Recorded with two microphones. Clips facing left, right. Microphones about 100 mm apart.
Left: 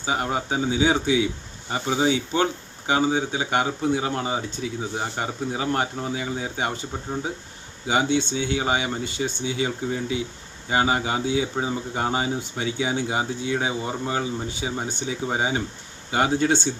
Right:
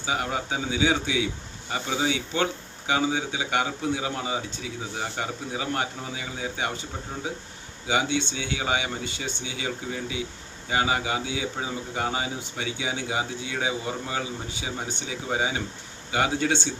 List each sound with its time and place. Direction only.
0.0 s speech: 35° left (ahead or behind)
7.9 s speech: 40° left (ahead or behind)